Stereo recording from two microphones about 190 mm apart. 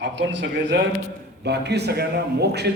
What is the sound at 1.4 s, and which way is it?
A man's voice, 60° right (ahead or behind).